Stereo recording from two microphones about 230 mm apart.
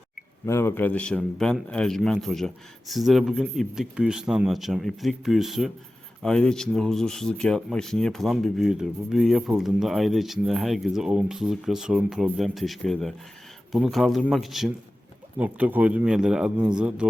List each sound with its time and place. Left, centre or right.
0.4 s speech: centre